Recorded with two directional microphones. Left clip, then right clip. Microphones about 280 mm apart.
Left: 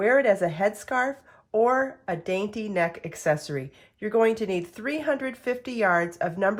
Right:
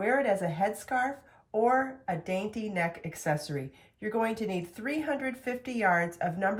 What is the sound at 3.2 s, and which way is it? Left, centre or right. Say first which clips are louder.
Speech: left 7 dB; centre.